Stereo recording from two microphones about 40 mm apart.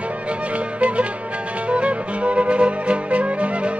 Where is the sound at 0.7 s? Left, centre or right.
Right.